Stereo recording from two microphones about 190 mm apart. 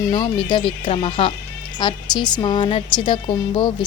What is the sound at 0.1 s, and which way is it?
A woman's voice, 25° left (ahead or behind).